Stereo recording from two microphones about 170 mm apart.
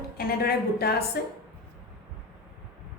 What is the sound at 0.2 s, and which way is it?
A woman's voice, 60° left (ahead or behind).